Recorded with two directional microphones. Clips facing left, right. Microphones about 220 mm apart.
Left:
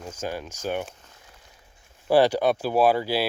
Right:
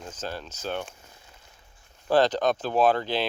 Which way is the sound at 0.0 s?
10° left (ahead or behind).